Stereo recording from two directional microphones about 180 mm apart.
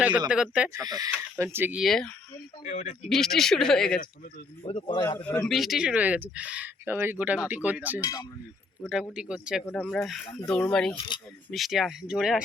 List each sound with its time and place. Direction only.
0.5 s speech: 5° right (ahead or behind)
0.8 s speech: 20° right (ahead or behind)
1.8 s speech: centre (ahead or behind)
2.6 s a man's voice: 45° left (ahead or behind)
3.1 s speech: centre (ahead or behind)
4.6 s a man's voice: 30° left (ahead or behind)
5.5 s speech: centre (ahead or behind)
8.0 s speech: 20° left (ahead or behind)
8.8 s speech: centre (ahead or behind)